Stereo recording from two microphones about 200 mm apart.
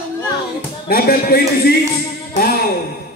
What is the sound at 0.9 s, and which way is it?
Speech, 50° left (ahead or behind).